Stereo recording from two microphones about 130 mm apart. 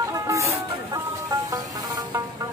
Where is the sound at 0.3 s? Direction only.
25° right (ahead or behind).